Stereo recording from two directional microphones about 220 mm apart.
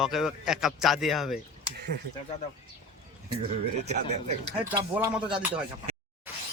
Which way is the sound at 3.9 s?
30° right (ahead or behind).